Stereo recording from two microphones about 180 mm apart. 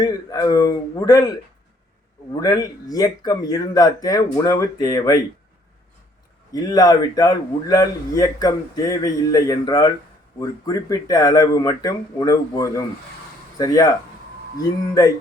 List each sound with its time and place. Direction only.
0.0 s a man's voice: 20° left (ahead or behind)
6.5 s a man's voice: 20° left (ahead or behind)